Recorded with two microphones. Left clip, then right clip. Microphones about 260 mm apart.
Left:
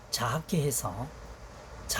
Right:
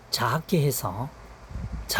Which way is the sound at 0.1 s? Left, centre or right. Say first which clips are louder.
Right 6 dB; right.